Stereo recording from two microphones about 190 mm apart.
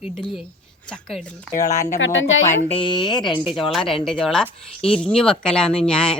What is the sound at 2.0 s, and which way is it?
Speech, 85° left.